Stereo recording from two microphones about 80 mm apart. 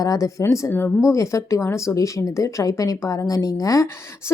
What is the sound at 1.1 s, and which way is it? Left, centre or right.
A woman's voice, left.